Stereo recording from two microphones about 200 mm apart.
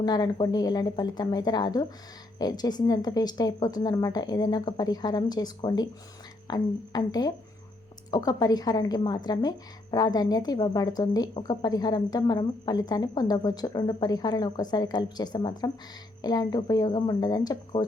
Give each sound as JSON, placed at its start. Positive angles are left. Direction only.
{"t": 0.0, "sound": "a woman's voice", "side_deg": 20}